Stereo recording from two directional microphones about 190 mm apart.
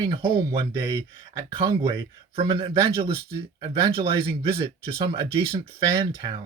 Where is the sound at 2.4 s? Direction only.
25° right (ahead or behind).